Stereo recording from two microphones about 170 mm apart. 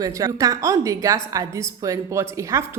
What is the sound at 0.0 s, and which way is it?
A woman's voice, 20° right (ahead or behind).